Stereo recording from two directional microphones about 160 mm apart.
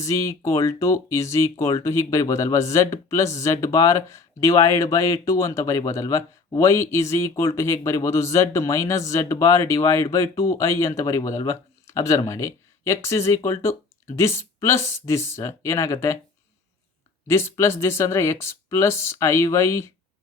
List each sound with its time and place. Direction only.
0.0 s speech: 20° left (ahead or behind)
17.2 s speech: 15° left (ahead or behind)